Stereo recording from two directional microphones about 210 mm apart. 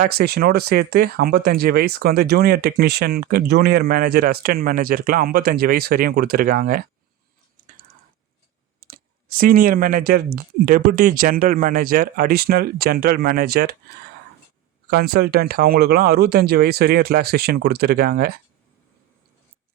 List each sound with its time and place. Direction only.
0.0 s speech: 50° right (ahead or behind)
8.8 s speech: 45° right (ahead or behind)
14.8 s speech: 45° right (ahead or behind)